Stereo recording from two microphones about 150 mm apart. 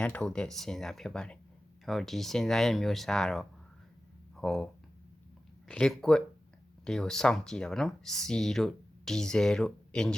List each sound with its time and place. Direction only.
0.0 s speech: 5° left (ahead or behind)